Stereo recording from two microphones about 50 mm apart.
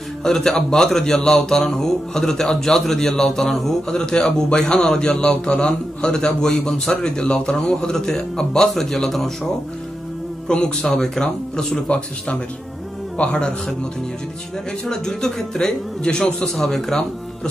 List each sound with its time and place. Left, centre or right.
0.2 s speech: centre
10.5 s speech: centre
13.2 s a man's voice: left
14.9 s speech: centre
16.4 s speech: centre